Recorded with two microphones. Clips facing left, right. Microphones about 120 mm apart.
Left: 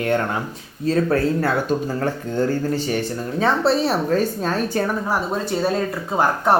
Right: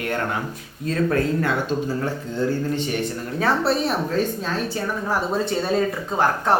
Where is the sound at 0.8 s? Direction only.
35° left (ahead or behind).